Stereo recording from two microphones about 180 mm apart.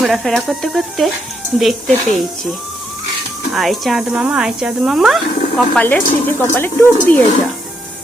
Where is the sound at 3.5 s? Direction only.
Centre (ahead or behind).